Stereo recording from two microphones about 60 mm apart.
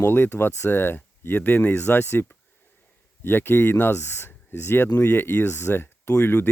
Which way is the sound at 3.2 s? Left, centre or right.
Left.